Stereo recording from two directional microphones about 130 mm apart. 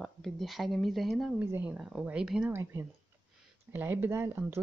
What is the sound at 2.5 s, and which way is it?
Speech, 20° right (ahead or behind).